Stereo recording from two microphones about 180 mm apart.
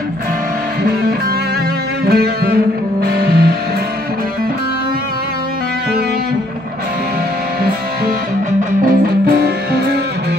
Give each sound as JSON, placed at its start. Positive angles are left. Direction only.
{"t": 2.0, "sound": "music", "side_deg": -60}
{"t": 8.5, "sound": "music", "side_deg": -55}